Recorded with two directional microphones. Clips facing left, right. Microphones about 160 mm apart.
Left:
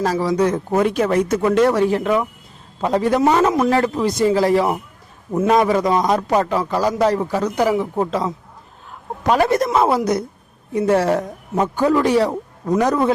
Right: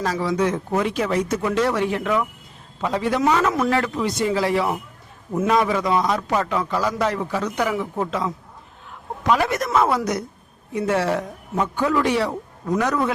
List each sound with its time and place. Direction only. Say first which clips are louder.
0.0 s speech: left 4 dB; 40° left (ahead or behind)
1.8 s a man's voice: left 5 dB; 35° left (ahead or behind)
2.8 s a man's voice: left 4 dB; 40° left (ahead or behind)